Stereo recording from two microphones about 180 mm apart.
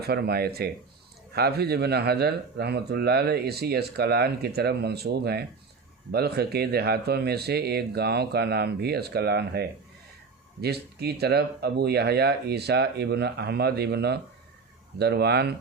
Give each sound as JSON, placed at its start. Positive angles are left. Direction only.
{"t": 0.0, "sound": "speech", "side_deg": -60}